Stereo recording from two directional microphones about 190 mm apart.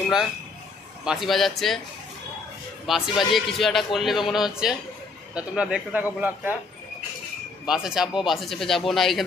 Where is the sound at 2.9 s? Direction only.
Centre (ahead or behind).